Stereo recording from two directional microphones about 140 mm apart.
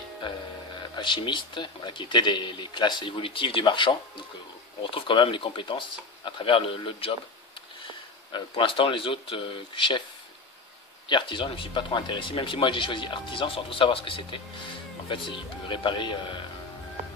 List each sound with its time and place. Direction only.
0.9 s speech: 35° left (ahead or behind)
8.3 s speech: 35° left (ahead or behind)
11.1 s speech: 35° left (ahead or behind)